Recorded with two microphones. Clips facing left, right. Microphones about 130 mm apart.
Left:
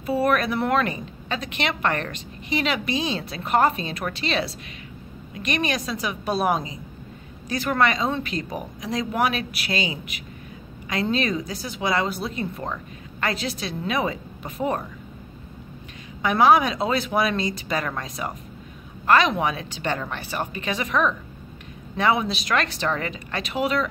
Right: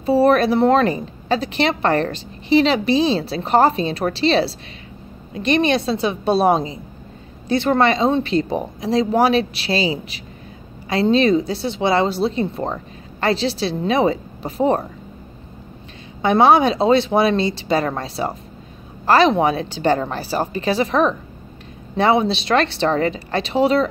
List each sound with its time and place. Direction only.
0.0 s a woman's voice: 30° right (ahead or behind)
16.2 s a woman's voice: 30° right (ahead or behind)